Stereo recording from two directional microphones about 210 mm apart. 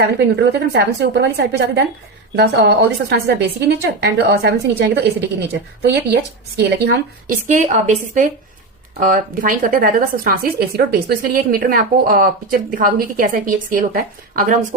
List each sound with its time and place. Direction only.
0.0 s a woman's voice: 50° right (ahead or behind)
7.4 s a woman's voice: 35° right (ahead or behind)